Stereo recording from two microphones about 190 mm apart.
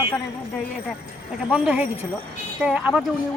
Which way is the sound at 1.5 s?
5° right (ahead or behind).